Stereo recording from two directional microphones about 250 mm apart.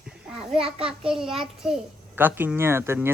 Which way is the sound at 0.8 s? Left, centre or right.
Centre.